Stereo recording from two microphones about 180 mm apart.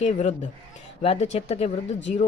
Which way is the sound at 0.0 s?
40° left (ahead or behind).